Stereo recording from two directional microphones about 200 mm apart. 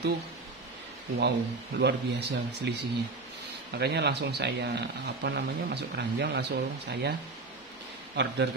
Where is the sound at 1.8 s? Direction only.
60° right (ahead or behind).